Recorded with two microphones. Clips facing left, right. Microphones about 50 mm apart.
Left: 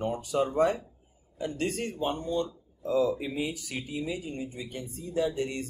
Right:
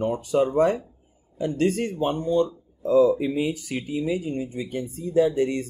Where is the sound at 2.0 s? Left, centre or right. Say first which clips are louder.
Right 7 dB; right.